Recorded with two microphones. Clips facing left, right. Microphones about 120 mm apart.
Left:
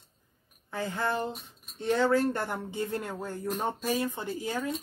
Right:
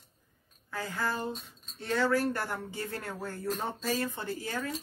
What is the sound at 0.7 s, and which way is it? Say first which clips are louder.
Speech: left 3 dB; 25° left (ahead or behind).